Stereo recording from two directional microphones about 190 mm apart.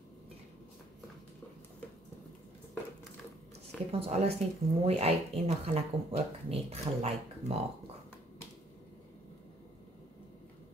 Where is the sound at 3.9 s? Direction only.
30° right (ahead or behind).